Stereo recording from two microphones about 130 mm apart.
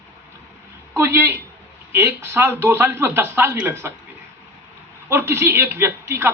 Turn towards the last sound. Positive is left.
turn(degrees=-20)  # may be behind; listen again after turning